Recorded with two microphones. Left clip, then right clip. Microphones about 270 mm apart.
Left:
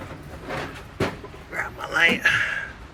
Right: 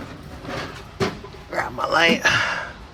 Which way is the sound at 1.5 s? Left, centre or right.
Centre.